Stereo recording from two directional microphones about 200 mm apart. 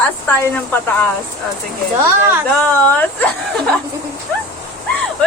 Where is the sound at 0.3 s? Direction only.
10° left (ahead or behind).